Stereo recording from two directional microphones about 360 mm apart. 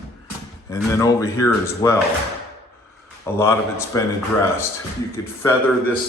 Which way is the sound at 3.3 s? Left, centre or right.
Centre.